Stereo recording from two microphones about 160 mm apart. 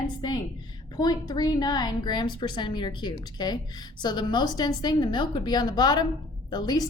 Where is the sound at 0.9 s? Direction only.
25° left (ahead or behind).